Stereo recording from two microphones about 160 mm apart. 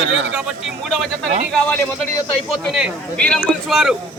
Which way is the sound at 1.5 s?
10° left (ahead or behind).